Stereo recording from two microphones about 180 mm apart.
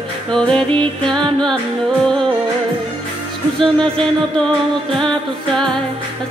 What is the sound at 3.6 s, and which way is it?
Music, 5° left (ahead or behind).